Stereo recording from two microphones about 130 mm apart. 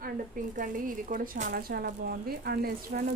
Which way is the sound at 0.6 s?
90° right.